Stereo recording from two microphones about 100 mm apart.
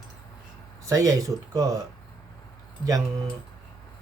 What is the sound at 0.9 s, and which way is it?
Speech, 35° right (ahead or behind).